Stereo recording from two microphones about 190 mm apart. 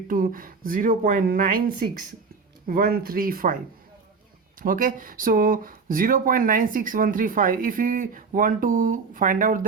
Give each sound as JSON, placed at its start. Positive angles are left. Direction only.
{"t": 0.1, "sound": "speech", "side_deg": -45}
{"t": 4.6, "sound": "speech", "side_deg": -45}